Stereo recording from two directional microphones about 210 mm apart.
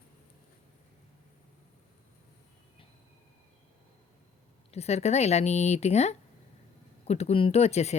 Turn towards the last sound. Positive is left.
turn(degrees=30)  # may be behind; listen again after turning